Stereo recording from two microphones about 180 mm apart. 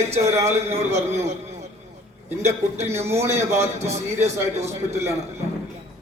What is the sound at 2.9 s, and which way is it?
Speech, 15° right (ahead or behind).